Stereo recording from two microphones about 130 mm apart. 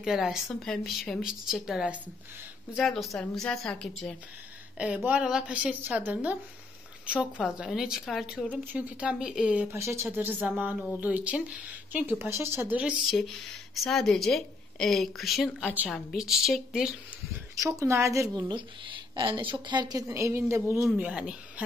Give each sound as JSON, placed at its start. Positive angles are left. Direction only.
{"t": 0.0, "sound": "a woman's voice", "side_deg": -5}
{"t": 4.7, "sound": "a woman's voice", "side_deg": -10}
{"t": 9.7, "sound": "a woman's voice", "side_deg": -20}
{"t": 13.8, "sound": "a woman's voice", "side_deg": 5}
{"t": 17.6, "sound": "a woman's voice", "side_deg": -25}
{"t": 18.5, "sound": "a woman's voice", "side_deg": -35}
{"t": 20.9, "sound": "a woman's voice", "side_deg": -10}